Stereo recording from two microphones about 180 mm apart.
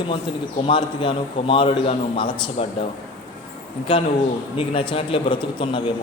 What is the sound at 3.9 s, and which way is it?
A man's voice, 30° left (ahead or behind).